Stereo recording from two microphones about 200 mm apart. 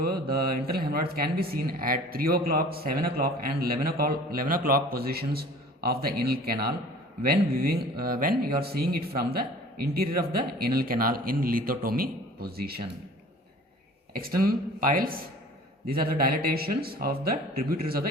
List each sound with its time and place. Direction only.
0.0 s a man's voice: 50° right (ahead or behind)
14.1 s a man's voice: 45° right (ahead or behind)